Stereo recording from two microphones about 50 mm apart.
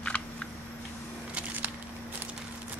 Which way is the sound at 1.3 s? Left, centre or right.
Right.